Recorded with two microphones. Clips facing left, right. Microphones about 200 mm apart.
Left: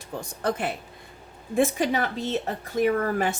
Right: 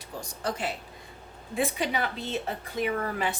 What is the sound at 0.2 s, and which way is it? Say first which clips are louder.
Speech: left 5 dB; 55° left (ahead or behind).